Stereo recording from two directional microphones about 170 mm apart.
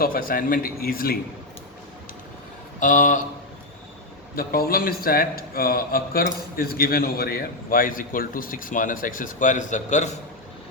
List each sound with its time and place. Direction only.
0.0 s a man's voice: 60° left (ahead or behind)
2.8 s speech: 50° left (ahead or behind)
4.4 s a man's voice: 60° left (ahead or behind); by 10.2 s 45° left (ahead or behind)